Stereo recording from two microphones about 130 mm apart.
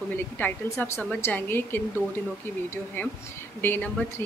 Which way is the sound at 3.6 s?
15° left (ahead or behind).